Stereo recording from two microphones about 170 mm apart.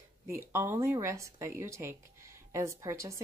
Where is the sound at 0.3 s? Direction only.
15° right (ahead or behind).